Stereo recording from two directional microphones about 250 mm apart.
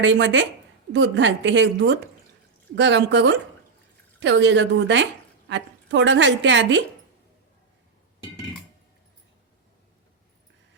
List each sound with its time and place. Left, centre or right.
0.0 s a woman's voice: right